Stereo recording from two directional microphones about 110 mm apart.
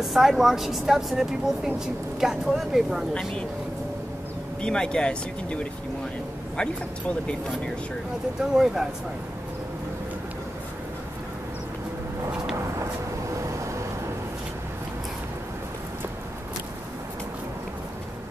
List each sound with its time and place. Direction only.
0.0 s a woman's voice: centre (ahead or behind)
4.6 s speech: 10° left (ahead or behind)
8.4 s a woman's voice: 5° right (ahead or behind)
13.5 s vehicle: 25° right (ahead or behind)